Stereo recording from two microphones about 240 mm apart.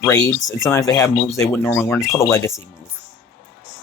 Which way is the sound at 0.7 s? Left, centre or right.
Centre.